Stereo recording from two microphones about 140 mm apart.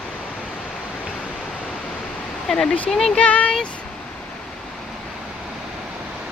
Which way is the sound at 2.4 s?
5° left (ahead or behind).